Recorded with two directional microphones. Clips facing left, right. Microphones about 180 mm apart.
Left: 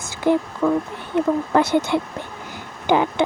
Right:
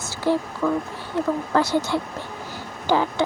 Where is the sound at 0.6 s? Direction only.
20° left (ahead or behind).